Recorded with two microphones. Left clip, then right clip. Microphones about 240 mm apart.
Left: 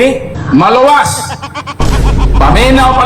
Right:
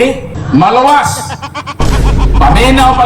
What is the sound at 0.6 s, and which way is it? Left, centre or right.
Speech, centre.